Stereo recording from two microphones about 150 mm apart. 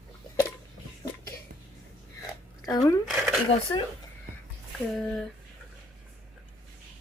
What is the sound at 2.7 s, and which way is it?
Speech, 25° left (ahead or behind).